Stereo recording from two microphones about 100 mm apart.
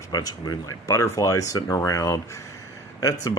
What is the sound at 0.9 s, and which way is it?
Speech, 30° left (ahead or behind).